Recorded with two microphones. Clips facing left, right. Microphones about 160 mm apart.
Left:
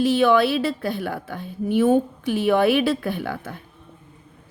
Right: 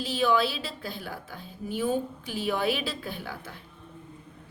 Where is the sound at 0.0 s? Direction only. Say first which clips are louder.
Left 8 dB; 65° left (ahead or behind).